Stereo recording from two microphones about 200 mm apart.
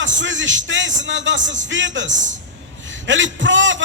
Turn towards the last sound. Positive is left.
turn(degrees=-70)  # may be behind; listen again after turning